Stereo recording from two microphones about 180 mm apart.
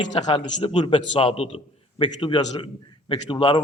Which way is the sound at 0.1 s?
35° left (ahead or behind).